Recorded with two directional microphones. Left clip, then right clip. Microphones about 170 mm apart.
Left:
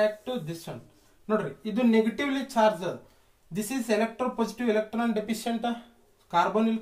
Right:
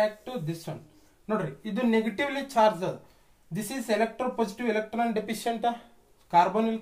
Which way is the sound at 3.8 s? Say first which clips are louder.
Right 1 dB; 30° right (ahead or behind).